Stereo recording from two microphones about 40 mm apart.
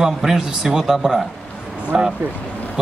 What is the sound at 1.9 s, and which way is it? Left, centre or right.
Speech, right.